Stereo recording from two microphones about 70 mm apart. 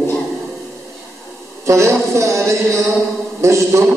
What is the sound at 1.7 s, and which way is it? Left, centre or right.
A man's voice, right.